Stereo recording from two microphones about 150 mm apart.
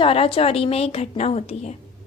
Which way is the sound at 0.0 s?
40° left (ahead or behind).